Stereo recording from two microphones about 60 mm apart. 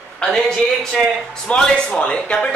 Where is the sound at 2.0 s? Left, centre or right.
Left.